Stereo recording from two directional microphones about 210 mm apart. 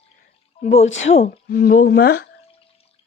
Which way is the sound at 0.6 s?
30° left (ahead or behind).